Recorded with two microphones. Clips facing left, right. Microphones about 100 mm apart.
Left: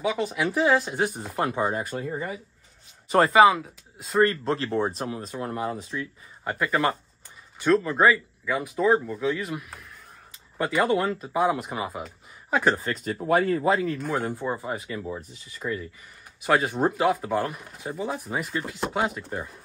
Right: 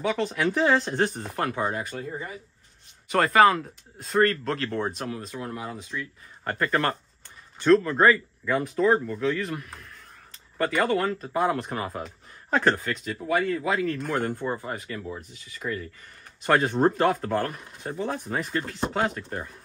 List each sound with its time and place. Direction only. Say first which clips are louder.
0.0 s speech: even; 10° left (ahead or behind)
1.9 s speech: left 3 dB; 30° left (ahead or behind)
3.3 s speech: even; 5° left (ahead or behind)
4.9 s speech: left 1 dB; 25° left (ahead or behind)
5.3 s speech: left 4 dB; 40° left (ahead or behind)
6.4 s speech: left 1 dB; 5° left (ahead or behind)
13.3 s speech: left 3 dB; 45° left (ahead or behind)
13.6 s speech: left 3 dB; 30° left (ahead or behind)
13.9 s speech: even; 5° left (ahead or behind)